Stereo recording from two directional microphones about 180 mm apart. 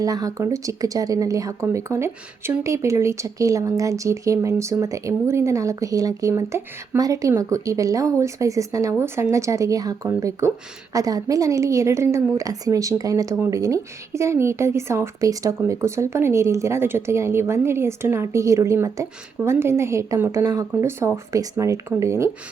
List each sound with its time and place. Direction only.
0.0 s speech: 20° right (ahead or behind)